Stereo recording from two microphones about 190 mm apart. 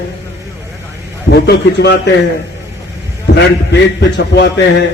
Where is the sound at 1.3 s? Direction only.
60° left (ahead or behind).